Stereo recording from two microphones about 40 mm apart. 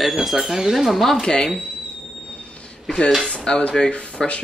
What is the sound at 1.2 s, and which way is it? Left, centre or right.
Speech, centre.